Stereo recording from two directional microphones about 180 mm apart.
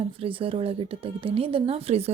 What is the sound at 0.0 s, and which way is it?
Speech, 30° right (ahead or behind).